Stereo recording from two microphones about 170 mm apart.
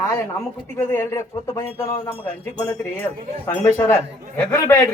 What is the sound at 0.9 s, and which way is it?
A man's voice, 15° left (ahead or behind).